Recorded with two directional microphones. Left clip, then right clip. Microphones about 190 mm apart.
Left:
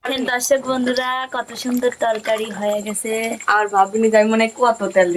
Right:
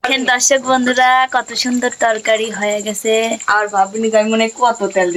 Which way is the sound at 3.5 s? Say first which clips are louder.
Left 1 dB; 10° left (ahead or behind).